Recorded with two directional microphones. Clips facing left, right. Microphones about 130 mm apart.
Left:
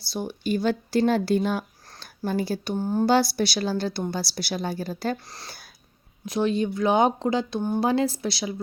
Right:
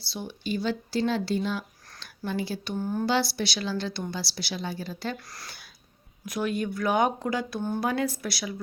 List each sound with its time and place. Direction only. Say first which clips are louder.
0.1 s a woman's voice: left 5 dB; 45° left (ahead or behind); by 3.1 s 30° left (ahead or behind)
3.1 s a woman's voice: left 6 dB; 45° left (ahead or behind)
5.3 s speech: left 2 dB; 25° left (ahead or behind)